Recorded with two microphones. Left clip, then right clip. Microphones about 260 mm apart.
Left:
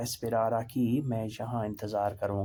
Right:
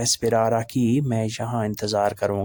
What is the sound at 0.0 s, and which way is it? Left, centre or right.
Speech, right.